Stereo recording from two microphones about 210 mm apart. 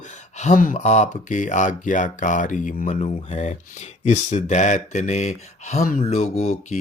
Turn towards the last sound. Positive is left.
turn(degrees=35)  # may be behind; listen again after turning